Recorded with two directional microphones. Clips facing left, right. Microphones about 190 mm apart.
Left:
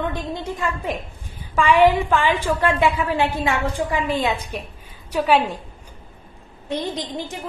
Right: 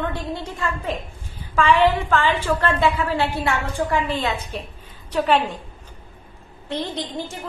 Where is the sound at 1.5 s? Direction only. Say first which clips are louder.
Left 2 dB; 15° left (ahead or behind).